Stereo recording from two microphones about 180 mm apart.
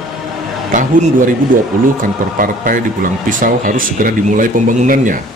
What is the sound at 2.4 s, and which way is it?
Speech, 50° right (ahead or behind).